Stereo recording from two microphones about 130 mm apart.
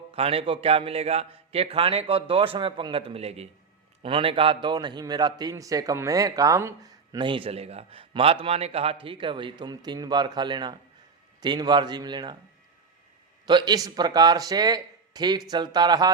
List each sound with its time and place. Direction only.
0.1 s a man's voice: 45° right (ahead or behind)
13.4 s a man's voice: 35° right (ahead or behind)